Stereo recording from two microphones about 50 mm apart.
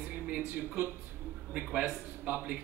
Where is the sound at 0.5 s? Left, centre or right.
Right.